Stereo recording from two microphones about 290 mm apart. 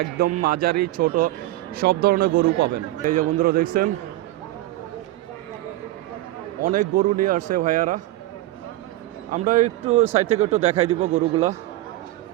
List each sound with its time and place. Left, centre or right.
0.0 s a man's voice: right
6.7 s a man's voice: right
9.3 s a man's voice: right